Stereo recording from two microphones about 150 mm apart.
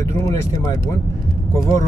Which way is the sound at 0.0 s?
20° left (ahead or behind).